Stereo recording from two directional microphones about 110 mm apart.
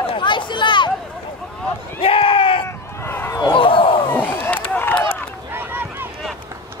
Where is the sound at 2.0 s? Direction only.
55° left (ahead or behind).